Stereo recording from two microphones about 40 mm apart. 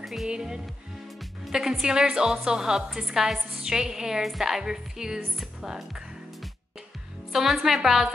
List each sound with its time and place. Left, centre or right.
0.0 s music: centre
0.3 s a woman's voice: centre
5.4 s speech: centre
7.3 s a woman's voice: centre